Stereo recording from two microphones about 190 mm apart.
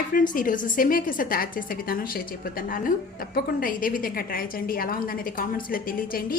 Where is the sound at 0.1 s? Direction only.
45° left (ahead or behind).